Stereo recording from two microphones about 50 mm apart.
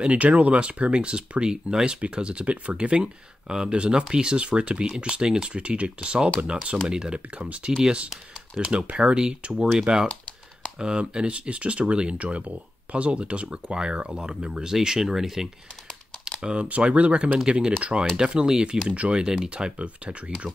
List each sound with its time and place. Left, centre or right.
0.0 s speech: right; by 15.5 s centre
16.3 s a sound: centre
16.5 s speech: right